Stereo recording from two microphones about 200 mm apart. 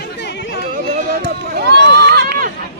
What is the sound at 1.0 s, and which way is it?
Run, 45° right (ahead or behind).